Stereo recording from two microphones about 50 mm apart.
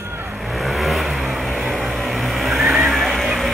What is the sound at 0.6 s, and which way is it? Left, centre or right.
Vehicle, centre.